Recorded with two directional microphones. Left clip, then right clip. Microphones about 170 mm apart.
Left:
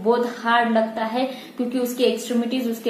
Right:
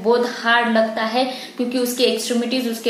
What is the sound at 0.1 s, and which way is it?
A woman's voice, 5° right (ahead or behind).